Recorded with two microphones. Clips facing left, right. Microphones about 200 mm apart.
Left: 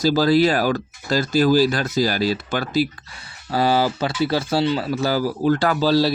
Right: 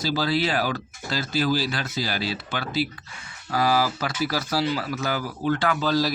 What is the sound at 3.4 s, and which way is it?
Speech, 30° left (ahead or behind).